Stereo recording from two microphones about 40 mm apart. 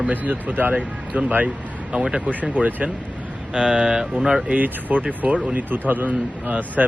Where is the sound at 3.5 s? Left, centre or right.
Right.